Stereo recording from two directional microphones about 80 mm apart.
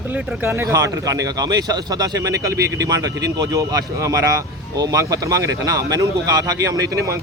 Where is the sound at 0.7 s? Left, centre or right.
Right.